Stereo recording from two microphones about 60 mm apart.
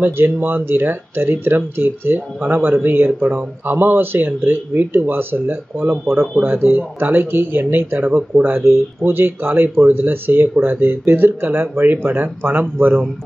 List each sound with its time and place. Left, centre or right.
0.0 s speech: right